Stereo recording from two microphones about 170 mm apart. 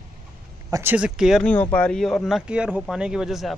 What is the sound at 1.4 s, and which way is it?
Speech, 10° left (ahead or behind).